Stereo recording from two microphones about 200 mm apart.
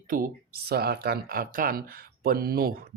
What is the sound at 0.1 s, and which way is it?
Speech, 40° right (ahead or behind).